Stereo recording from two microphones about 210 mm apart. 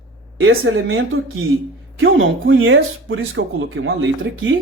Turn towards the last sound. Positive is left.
turn(degrees=-65)  # may be behind; listen again after turning